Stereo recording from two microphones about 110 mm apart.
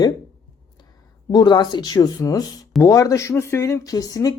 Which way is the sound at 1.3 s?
40° left (ahead or behind).